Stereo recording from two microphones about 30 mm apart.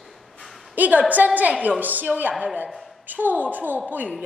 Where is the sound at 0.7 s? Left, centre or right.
Right.